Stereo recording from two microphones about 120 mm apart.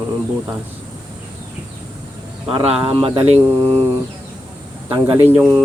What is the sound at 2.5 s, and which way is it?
Speech, 50° right (ahead or behind).